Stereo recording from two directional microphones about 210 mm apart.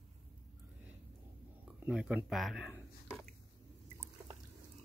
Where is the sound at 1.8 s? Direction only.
5° right (ahead or behind).